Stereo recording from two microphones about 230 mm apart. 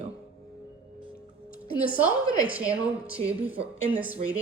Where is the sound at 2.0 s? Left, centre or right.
Centre.